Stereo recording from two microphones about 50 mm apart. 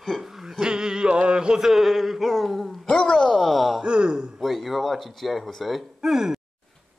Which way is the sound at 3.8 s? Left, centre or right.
Centre.